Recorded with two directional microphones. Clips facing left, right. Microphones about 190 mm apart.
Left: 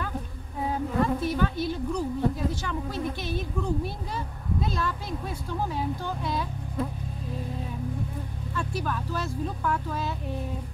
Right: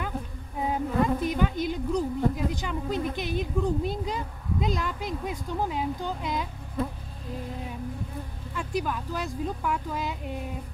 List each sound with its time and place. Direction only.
0.7 s a woman's voice: 15° right (ahead or behind)
8.5 s a woman's voice: 15° right (ahead or behind)